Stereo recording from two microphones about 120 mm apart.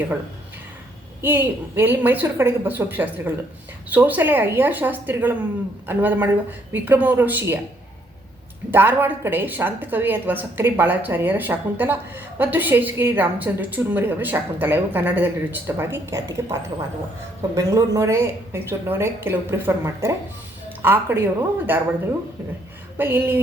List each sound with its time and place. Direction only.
1.2 s a woman's voice: 15° right (ahead or behind)
8.7 s a woman's voice: 15° right (ahead or behind)
23.0 s a woman's voice: 20° right (ahead or behind)